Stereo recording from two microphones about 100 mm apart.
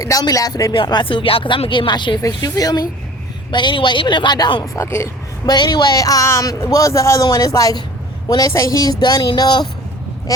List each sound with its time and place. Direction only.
0.0 s speech: 35° left (ahead or behind)
2.2 s speech: 40° left (ahead or behind)
3.5 s speech: 50° left (ahead or behind)
4.6 s speech: 30° left (ahead or behind)
5.5 s speech: 50° left (ahead or behind)